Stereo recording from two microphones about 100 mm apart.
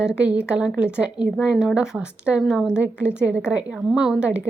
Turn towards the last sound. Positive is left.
turn(degrees=-15)  # may be behind; listen again after turning